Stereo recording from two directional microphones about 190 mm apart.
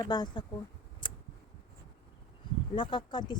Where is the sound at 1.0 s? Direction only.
25° left (ahead or behind).